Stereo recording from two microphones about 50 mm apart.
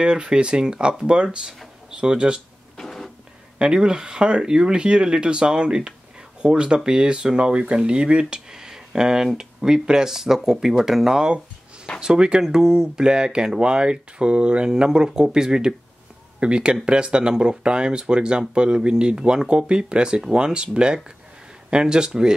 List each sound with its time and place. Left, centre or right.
0.0 s speech: centre
2.8 s printer: centre
3.5 s speech: centre